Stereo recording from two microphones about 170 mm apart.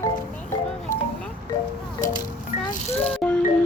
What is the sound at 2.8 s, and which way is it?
Music, 10° left (ahead or behind).